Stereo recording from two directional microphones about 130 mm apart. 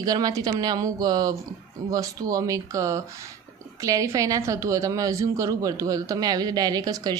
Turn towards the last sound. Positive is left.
turn(degrees=-30)  # may be behind; listen again after turning